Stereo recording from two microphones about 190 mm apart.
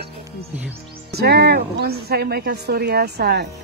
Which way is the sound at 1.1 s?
55° right (ahead or behind).